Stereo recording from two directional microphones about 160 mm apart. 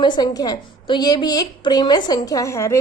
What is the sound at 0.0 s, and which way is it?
A woman's voice, 25° left (ahead or behind).